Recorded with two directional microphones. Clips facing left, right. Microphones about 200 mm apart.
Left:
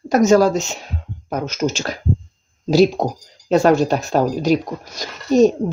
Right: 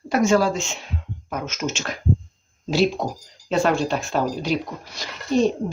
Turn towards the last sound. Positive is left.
turn(degrees=45)  # may be behind; listen again after turning